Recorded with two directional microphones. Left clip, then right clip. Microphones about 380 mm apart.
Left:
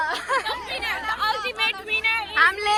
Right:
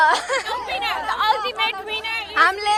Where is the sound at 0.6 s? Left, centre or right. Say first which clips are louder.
Right 3 dB; centre.